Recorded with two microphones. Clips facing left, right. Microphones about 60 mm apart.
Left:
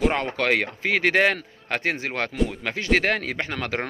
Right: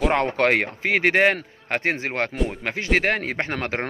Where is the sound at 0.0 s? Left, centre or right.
Right.